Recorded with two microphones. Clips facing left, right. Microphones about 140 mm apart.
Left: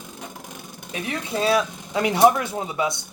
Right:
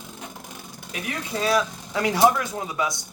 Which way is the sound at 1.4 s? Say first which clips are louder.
Left 2 dB; 25° left (ahead or behind).